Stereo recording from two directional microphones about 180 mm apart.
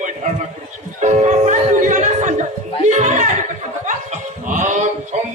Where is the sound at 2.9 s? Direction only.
40° right (ahead or behind).